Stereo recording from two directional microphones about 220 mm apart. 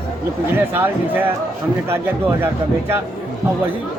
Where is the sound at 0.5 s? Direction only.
10° right (ahead or behind).